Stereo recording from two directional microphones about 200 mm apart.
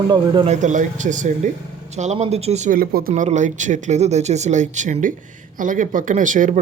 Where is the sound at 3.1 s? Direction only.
35° right (ahead or behind).